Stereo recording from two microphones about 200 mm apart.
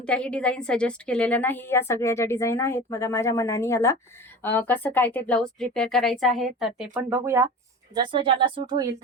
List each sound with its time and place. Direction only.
0.0 s a woman's voice: 5° left (ahead or behind); by 7.4 s 10° right (ahead or behind)
7.9 s speech: 25° right (ahead or behind)